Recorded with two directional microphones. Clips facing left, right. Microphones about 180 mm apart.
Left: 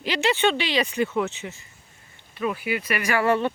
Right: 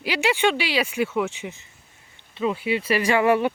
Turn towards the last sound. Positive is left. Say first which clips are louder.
# right 2 dB
turn(degrees=-10)  # may be behind; listen again after turning